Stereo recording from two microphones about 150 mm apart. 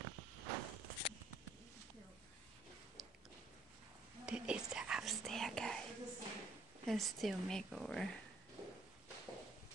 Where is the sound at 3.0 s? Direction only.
Centre (ahead or behind).